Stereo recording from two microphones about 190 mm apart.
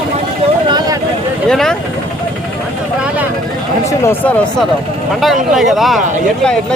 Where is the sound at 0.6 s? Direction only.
20° right (ahead or behind).